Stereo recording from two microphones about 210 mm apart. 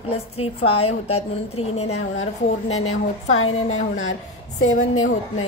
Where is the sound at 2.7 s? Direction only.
85° left.